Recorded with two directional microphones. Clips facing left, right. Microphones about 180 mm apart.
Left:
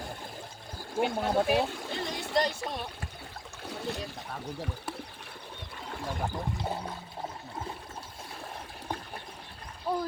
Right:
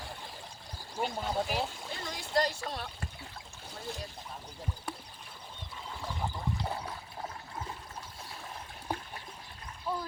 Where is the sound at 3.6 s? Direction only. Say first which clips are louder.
Left 6 dB; 70° left (ahead or behind).